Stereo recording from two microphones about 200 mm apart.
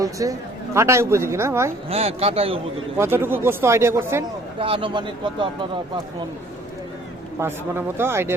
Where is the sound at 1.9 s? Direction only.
30° right (ahead or behind).